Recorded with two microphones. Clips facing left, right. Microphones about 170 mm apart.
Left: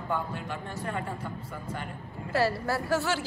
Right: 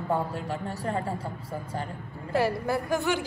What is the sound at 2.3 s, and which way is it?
Speech, 15° right (ahead or behind).